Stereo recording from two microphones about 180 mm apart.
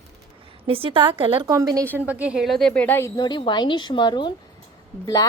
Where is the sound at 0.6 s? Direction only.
30° right (ahead or behind).